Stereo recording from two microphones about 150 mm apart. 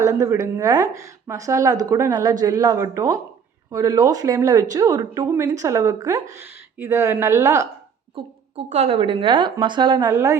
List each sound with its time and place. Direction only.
0.0 s a woman's voice: 20° right (ahead or behind)
8.1 s a woman's voice: 45° right (ahead or behind)
10.1 s speech: 15° right (ahead or behind)